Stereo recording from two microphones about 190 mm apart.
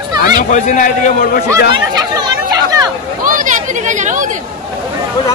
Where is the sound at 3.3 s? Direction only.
45° right (ahead or behind).